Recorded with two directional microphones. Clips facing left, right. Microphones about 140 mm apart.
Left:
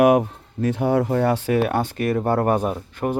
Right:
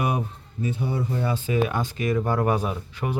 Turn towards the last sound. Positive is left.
turn(degrees=45)  # may be behind; listen again after turning